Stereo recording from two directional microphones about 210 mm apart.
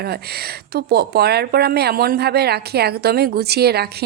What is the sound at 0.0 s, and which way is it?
A woman's voice, 50° right (ahead or behind).